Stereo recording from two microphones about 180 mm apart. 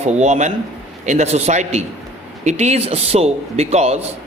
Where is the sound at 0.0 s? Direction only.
40° right (ahead or behind).